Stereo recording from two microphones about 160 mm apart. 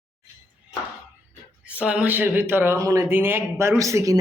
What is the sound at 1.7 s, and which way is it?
Speech, 10° right (ahead or behind).